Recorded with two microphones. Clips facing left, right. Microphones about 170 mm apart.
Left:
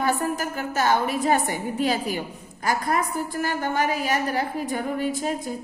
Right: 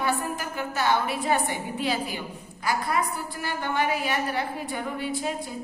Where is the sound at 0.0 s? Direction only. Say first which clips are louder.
Left 4 dB; 45° left (ahead or behind).